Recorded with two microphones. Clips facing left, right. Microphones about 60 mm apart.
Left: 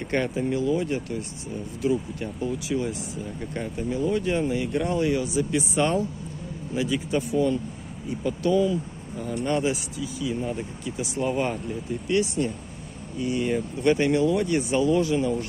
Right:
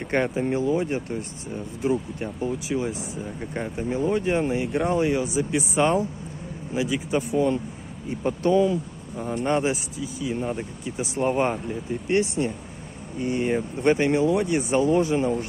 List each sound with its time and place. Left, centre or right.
0.0 s speech: right
8.1 s speech: right